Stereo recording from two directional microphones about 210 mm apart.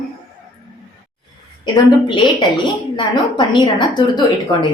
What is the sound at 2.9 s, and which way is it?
A woman's voice, 20° left (ahead or behind).